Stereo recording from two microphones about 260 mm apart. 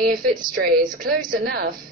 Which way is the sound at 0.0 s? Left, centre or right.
Right.